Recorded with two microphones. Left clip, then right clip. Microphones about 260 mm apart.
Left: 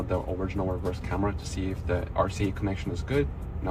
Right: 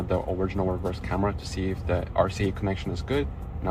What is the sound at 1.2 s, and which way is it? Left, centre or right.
Speech, right.